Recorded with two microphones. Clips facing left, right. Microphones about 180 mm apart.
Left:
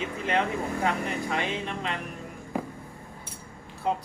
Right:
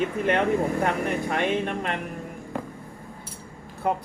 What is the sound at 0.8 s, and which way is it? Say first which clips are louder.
Speech: right 3 dB; 55° right (ahead or behind).